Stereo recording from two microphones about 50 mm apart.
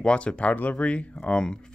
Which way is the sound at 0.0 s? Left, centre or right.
Centre.